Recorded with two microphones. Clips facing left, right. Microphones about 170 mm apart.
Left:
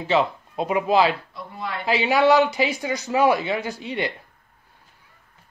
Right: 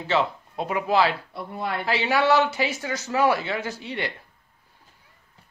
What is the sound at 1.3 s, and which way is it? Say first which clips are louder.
Speech: right 2 dB; 60° right (ahead or behind).